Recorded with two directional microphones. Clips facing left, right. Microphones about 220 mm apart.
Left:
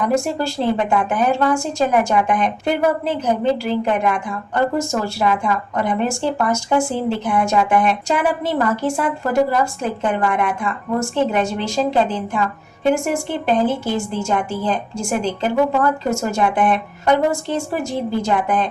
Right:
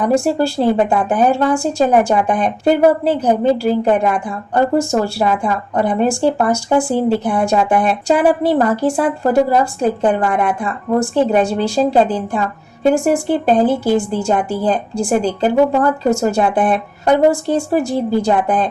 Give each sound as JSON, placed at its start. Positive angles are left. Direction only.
{"t": 0.0, "sound": "a woman's voice", "side_deg": -30}